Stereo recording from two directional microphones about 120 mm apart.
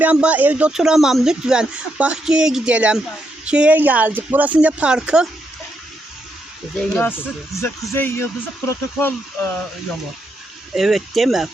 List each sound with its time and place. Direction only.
0.0 s speech: 10° right (ahead or behind)
6.7 s speech: 15° left (ahead or behind)
10.8 s speech: centre (ahead or behind)